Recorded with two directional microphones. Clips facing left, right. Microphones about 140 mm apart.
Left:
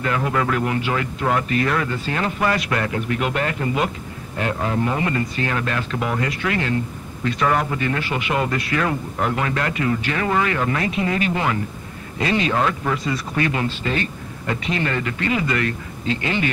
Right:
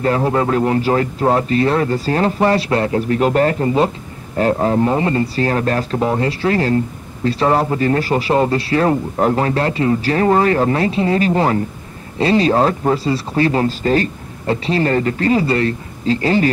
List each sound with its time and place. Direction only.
0.0 s speech: 35° right (ahead or behind)